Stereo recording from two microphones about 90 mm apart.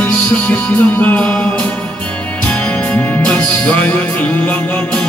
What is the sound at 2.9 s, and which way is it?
Music, 20° left (ahead or behind).